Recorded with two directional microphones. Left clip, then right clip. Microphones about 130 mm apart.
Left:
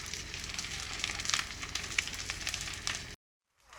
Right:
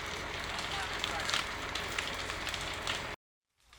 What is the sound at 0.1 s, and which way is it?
Fire, centre (ahead or behind).